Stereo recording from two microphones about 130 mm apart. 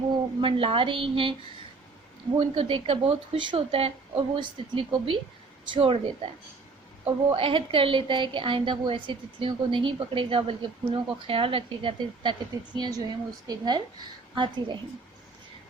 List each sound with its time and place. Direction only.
0.4 s a woman's voice: 45° right (ahead or behind)
2.4 s a woman's voice: 45° right (ahead or behind)
7.3 s a woman's voice: 45° right (ahead or behind)